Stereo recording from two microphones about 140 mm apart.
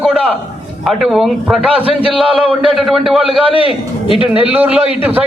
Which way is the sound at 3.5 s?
40° left (ahead or behind).